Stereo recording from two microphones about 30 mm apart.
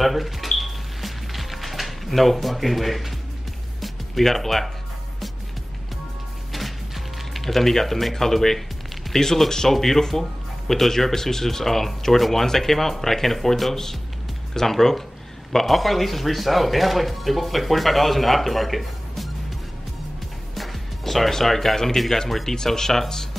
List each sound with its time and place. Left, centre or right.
0.0 s music: centre
7.3 s speech: centre
20.5 s music: centre
21.3 s speech: centre